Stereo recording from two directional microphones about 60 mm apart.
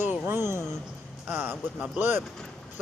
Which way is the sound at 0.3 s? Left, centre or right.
Right.